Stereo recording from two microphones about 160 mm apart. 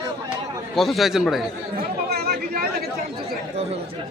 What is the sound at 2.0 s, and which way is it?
Chatter, 75° right (ahead or behind).